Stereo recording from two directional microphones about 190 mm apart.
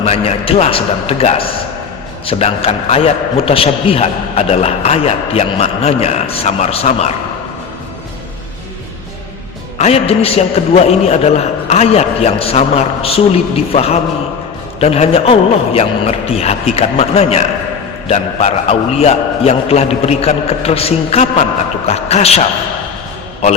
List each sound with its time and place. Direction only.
0.0 s a man's voice: 30° left (ahead or behind)
9.7 s a man's voice: 35° left (ahead or behind)